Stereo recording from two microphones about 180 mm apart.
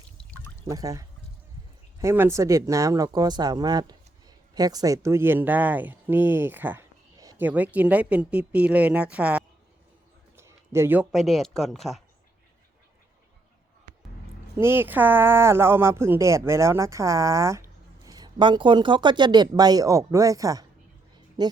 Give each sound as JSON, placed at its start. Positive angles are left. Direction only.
{"t": 0.6, "sound": "speech", "side_deg": -20}
{"t": 10.3, "sound": "a sound", "side_deg": -15}
{"t": 11.1, "sound": "speech", "side_deg": 0}
{"t": 14.5, "sound": "speech", "side_deg": -15}